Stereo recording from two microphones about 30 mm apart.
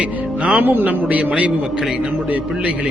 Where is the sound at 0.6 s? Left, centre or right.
Right.